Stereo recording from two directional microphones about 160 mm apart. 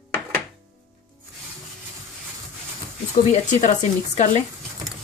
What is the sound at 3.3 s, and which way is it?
A woman's voice, 45° left (ahead or behind).